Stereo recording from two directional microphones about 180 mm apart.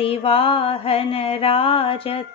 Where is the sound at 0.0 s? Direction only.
30° left (ahead or behind).